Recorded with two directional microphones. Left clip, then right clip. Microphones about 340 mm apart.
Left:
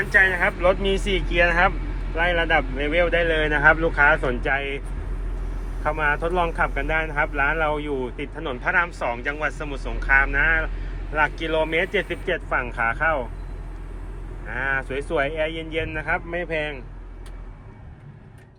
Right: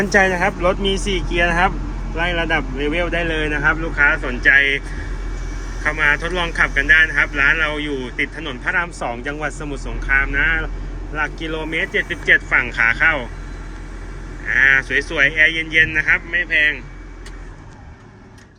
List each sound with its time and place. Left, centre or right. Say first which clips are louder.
0.1 s a man's voice: right 1 dB; centre
6.0 s a man's voice: right 4 dB; centre
14.5 s speech: right 11 dB; centre